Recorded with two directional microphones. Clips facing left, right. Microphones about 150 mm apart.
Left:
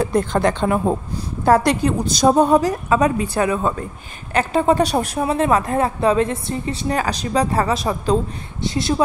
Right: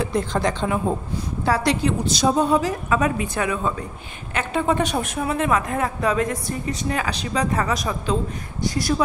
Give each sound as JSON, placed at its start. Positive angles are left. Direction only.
{"t": 0.0, "sound": "a woman's voice", "side_deg": 50}
{"t": 2.9, "sound": "a woman's voice", "side_deg": 35}